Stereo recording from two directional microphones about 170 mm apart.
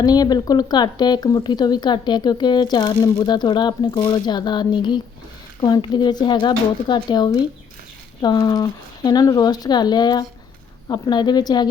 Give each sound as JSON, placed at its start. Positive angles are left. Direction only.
{"t": 0.0, "sound": "a woman's voice", "side_deg": 25}